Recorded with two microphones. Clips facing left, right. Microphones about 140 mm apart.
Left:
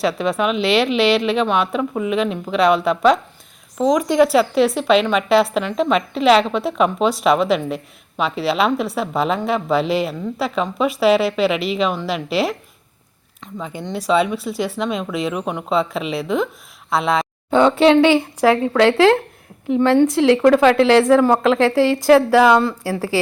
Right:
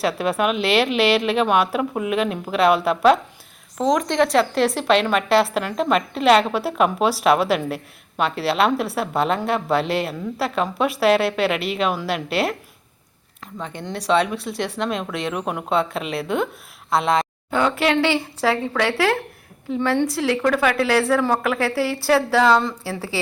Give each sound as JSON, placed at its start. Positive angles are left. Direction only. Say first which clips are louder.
{"t": 0.0, "sound": "a woman's voice", "louder": "left 2 dB", "side_deg": -5}
{"t": 17.5, "sound": "a woman's voice", "louder": "left 7 dB", "side_deg": 25}